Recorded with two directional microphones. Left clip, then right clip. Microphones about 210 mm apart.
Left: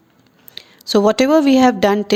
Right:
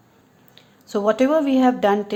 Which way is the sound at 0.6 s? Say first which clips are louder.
Left 9 dB; 45° left (ahead or behind).